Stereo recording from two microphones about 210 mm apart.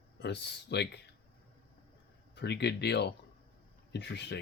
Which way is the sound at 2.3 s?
55° left (ahead or behind).